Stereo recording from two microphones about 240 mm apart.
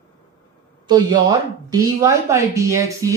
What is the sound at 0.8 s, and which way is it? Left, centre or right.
A man's voice, centre.